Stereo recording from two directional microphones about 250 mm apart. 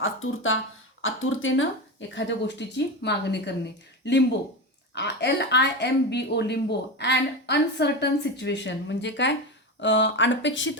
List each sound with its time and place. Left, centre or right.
0.0 s speech: left